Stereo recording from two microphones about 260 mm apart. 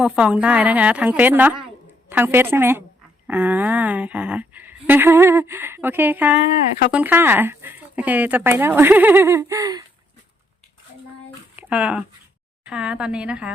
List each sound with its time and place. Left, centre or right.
0.0 s a woman's voice: centre
11.5 s a woman's voice: centre